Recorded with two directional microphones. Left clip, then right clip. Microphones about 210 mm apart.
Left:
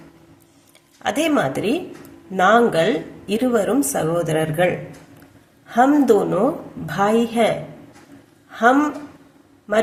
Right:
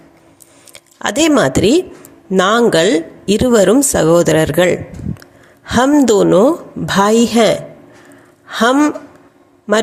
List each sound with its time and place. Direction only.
0.7 s speech: 45° right (ahead or behind)